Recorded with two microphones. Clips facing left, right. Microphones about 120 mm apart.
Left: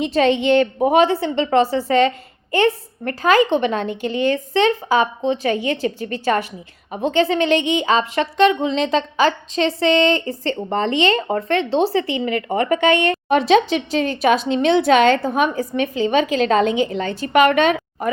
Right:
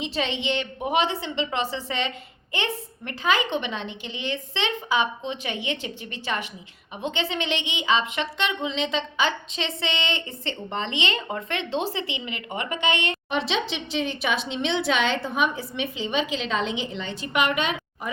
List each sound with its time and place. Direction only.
0.0 s speech: 45° left (ahead or behind)